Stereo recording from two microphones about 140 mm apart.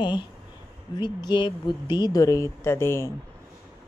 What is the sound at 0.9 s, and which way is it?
Speech, 35° left (ahead or behind).